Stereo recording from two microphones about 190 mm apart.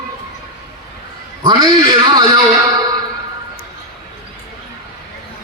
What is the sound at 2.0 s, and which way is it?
Speech, 25° right (ahead or behind).